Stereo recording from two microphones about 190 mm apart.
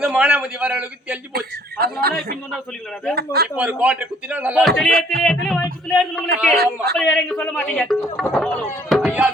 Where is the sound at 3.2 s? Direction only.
55° right (ahead or behind).